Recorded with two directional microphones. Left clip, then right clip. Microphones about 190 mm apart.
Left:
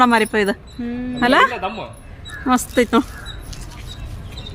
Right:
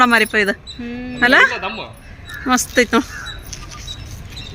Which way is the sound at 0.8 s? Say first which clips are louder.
Left 2 dB; 50° left (ahead or behind).